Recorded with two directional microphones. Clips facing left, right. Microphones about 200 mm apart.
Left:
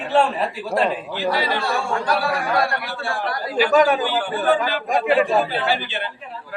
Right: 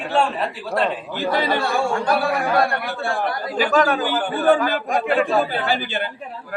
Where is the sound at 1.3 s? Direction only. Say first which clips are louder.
Right 4 dB; 50° right (ahead or behind).